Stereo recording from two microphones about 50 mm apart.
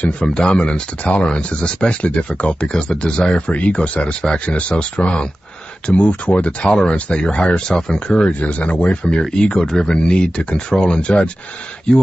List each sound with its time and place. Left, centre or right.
0.3 s speech: centre